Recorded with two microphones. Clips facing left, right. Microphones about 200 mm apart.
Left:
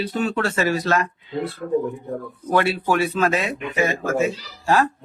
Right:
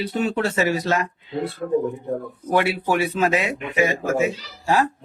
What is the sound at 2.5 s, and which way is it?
Speech, 15° right (ahead or behind).